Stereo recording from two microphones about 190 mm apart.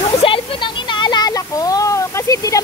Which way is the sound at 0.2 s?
25° left (ahead or behind).